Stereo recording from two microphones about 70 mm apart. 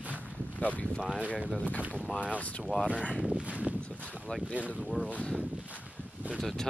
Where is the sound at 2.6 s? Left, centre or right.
Centre.